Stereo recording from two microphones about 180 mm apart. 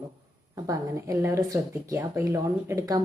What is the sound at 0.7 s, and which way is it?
Speech, 15° right (ahead or behind).